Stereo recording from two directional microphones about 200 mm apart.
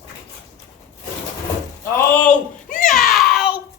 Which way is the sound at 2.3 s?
40° left (ahead or behind).